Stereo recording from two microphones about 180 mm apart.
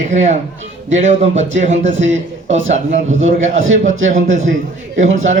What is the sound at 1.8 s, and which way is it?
Speech, 90° right.